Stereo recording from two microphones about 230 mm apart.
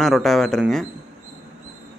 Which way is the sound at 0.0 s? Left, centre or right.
Centre.